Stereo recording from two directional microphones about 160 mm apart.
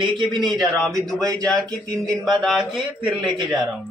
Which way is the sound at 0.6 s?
Centre (ahead or behind).